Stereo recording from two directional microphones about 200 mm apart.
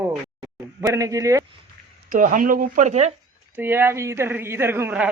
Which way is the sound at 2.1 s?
40° right (ahead or behind).